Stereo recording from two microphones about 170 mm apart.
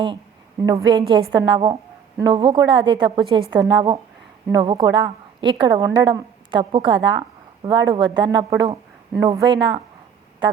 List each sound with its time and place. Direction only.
0.6 s a woman's voice: 20° right (ahead or behind)